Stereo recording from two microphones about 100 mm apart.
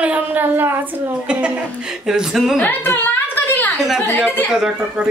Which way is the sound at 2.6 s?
20° left (ahead or behind).